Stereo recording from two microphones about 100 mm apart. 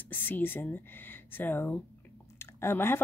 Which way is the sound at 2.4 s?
25° left (ahead or behind).